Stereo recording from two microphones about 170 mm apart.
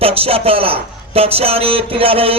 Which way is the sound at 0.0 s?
35° right (ahead or behind).